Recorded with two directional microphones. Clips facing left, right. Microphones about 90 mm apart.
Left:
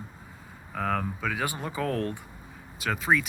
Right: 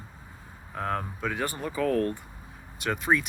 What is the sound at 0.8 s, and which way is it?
Speech, 5° right (ahead or behind).